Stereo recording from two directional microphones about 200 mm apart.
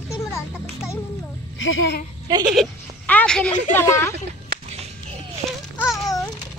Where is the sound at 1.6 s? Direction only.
70° left (ahead or behind).